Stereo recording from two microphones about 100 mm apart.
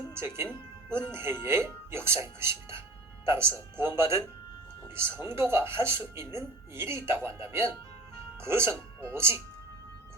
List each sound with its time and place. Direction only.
0.1 s speech: 25° right (ahead or behind)